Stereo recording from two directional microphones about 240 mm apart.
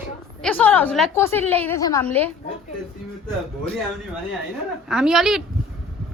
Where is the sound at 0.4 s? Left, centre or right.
Centre.